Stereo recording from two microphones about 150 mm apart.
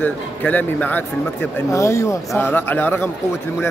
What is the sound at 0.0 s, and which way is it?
Speech, 10° left (ahead or behind).